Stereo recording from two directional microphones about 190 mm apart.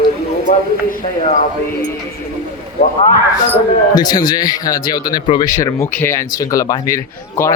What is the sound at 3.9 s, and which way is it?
Speech, 20° left (ahead or behind).